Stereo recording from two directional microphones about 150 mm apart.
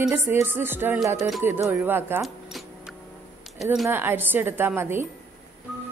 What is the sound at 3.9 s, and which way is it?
A woman's voice, 15° right (ahead or behind).